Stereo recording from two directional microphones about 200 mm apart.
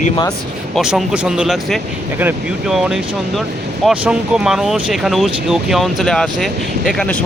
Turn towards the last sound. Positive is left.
turn(degrees=5)  # may be behind; listen again after turning